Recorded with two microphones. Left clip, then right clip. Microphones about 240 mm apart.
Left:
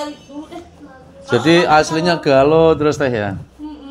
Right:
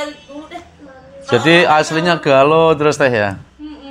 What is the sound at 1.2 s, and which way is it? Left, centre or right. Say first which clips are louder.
A man's voice: right 2 dB; right.